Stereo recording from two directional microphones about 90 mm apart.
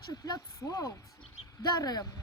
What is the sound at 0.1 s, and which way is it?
Speech, 45° left (ahead or behind).